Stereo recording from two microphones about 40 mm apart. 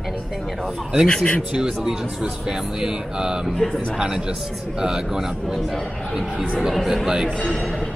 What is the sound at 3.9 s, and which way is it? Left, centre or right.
Speech, centre.